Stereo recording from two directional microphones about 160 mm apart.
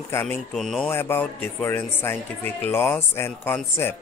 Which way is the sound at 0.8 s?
15° left (ahead or behind).